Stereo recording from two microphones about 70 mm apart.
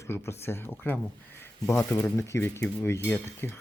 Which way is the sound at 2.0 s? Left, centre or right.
Left.